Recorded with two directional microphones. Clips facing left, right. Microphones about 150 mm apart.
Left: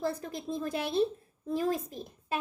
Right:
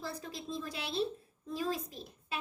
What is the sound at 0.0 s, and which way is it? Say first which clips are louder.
A woman's voice: left 8 dB; 50° left (ahead or behind).